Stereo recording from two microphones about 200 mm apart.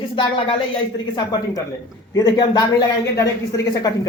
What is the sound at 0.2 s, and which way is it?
Speech, 25° left (ahead or behind).